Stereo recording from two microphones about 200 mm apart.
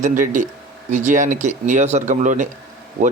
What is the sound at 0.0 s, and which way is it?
A man's voice, 40° right (ahead or behind).